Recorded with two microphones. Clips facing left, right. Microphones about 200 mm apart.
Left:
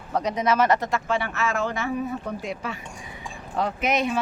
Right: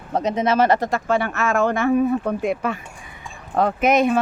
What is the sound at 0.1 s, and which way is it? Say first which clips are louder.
Speech: right 3 dB; 25° right (ahead or behind).